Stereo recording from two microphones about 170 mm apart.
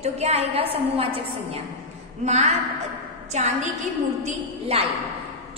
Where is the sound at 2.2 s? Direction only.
40° right (ahead or behind).